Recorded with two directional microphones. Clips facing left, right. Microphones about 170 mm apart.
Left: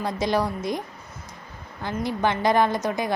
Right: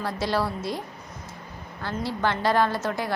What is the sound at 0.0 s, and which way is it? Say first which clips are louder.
Speech: left 2 dB; 15° left (ahead or behind).